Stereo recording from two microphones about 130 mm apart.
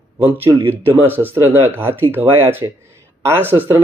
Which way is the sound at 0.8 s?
15° right (ahead or behind).